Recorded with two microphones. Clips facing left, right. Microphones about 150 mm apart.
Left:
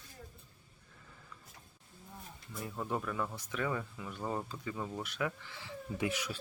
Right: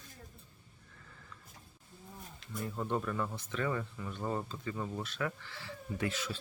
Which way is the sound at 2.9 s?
Centre (ahead or behind).